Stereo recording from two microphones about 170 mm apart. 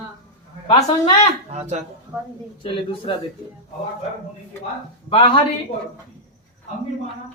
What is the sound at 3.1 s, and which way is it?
Speech, 30° left (ahead or behind).